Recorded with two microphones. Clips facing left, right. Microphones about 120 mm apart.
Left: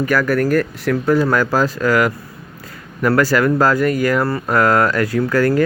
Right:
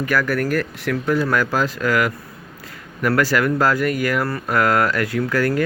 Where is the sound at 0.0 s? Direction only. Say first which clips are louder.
Left 4 dB; 40° left (ahead or behind).